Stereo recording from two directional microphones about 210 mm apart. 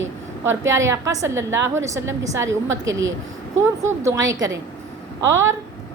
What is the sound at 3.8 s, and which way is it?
A woman's voice, 15° right (ahead or behind).